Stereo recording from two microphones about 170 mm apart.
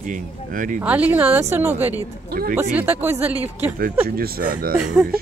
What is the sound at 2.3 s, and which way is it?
Speech, 60° right (ahead or behind).